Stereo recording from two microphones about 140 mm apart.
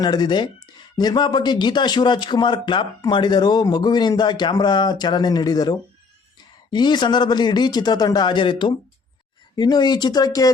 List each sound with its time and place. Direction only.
0.0 s speech: 30° left (ahead or behind)